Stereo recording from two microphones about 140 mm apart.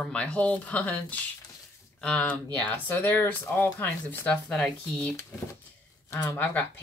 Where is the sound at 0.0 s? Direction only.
10° left (ahead or behind).